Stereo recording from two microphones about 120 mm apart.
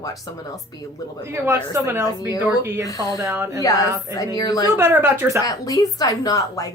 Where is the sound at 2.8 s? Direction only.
30° left (ahead or behind).